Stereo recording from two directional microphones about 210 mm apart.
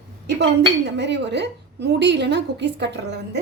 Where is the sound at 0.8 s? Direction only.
55° right (ahead or behind).